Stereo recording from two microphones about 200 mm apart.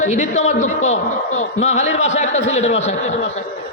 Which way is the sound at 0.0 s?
40° left (ahead or behind).